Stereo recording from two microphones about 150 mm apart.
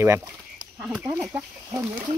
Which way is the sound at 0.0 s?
20° right (ahead or behind).